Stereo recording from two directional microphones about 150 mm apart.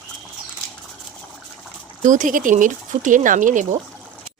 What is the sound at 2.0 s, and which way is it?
Speech, 60° right (ahead or behind).